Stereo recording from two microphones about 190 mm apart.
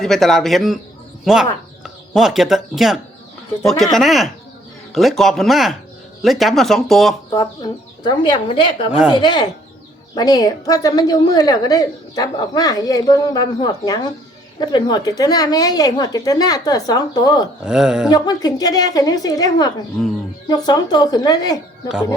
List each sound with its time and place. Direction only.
0.0 s speech: centre (ahead or behind)
7.3 s a woman's voice: 20° left (ahead or behind)
17.7 s speech: 5° right (ahead or behind)
18.1 s a woman's voice: 20° left (ahead or behind)